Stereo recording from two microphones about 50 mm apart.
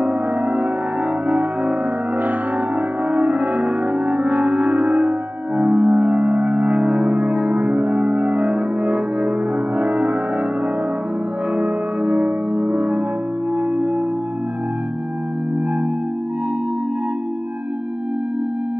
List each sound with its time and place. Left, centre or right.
0.0 s music: right
3.1 s music: right
11.5 s music: right